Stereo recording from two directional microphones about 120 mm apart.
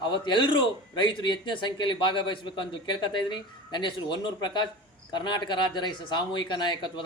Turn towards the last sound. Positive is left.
turn(degrees=40)  # may be behind; listen again after turning